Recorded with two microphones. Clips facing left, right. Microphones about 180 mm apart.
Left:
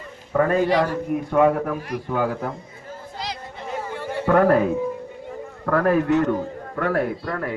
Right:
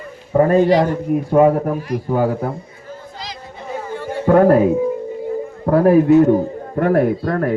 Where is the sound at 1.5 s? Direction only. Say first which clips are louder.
Right 5 dB; 35° right (ahead or behind).